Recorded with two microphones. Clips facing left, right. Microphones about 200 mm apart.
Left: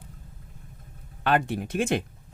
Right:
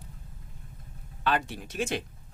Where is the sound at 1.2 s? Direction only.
55° left (ahead or behind).